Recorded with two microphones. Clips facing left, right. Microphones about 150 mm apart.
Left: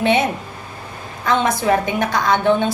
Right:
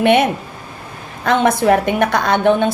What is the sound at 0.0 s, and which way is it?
A woman's voice, 60° right (ahead or behind).